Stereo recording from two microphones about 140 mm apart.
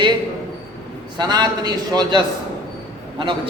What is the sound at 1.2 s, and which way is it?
A man's voice, 30° right (ahead or behind).